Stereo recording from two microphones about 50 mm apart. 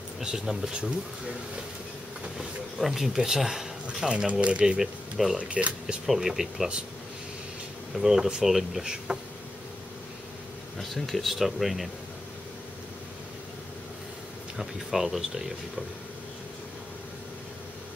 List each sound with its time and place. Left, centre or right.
0.2 s speech: centre
2.2 s speech: centre
4.3 s speech: right
4.7 s speech: centre
5.4 s speech: right
6.0 s speech: centre
7.9 s speech: centre
8.8 s speech: centre
10.8 s speech: centre
14.6 s speech: centre